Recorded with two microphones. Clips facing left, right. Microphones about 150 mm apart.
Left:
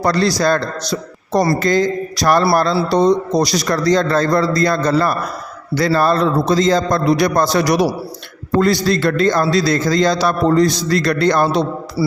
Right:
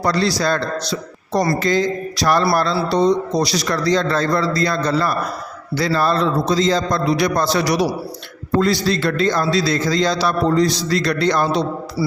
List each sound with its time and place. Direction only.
0.0 s a man's voice: 45° left (ahead or behind)